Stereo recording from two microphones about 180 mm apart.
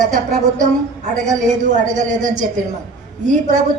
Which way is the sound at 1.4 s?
45° right (ahead or behind).